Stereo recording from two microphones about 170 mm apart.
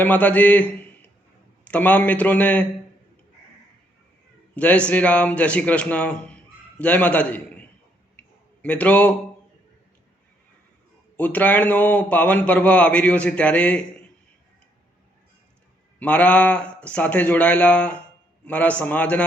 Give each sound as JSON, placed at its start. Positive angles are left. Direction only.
{"t": 0.0, "sound": "a man's voice", "side_deg": 10}
{"t": 4.5, "sound": "a man's voice", "side_deg": 10}
{"t": 11.2, "sound": "a man's voice", "side_deg": 10}
{"t": 16.0, "sound": "a man's voice", "side_deg": 10}